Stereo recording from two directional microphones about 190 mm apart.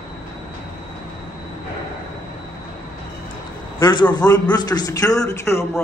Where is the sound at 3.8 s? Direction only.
25° left (ahead or behind).